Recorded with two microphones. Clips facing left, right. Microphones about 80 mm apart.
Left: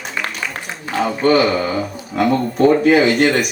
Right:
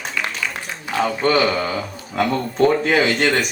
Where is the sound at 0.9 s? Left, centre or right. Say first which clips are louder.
Left 3 dB; centre.